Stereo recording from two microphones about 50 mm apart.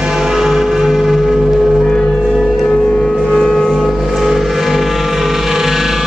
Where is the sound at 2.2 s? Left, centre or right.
Centre.